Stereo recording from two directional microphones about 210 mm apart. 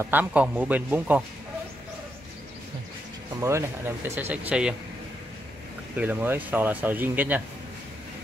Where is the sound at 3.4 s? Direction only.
15° right (ahead or behind).